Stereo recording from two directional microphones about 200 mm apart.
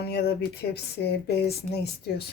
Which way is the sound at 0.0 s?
50° left (ahead or behind).